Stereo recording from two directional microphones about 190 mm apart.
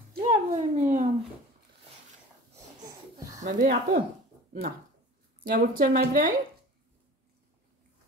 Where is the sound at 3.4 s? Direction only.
45° right (ahead or behind).